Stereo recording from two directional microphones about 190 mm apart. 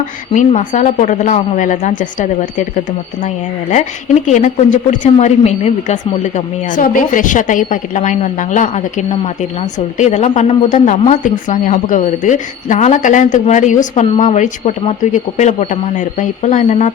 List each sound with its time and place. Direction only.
0.0 s speech: 40° left (ahead or behind)